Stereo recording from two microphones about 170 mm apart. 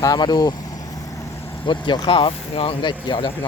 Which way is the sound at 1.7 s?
30° left (ahead or behind).